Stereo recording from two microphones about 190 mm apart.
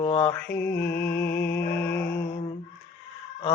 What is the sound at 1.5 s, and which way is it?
Music, 10° left (ahead or behind).